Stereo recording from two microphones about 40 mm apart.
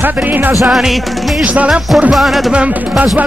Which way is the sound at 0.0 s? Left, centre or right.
Right.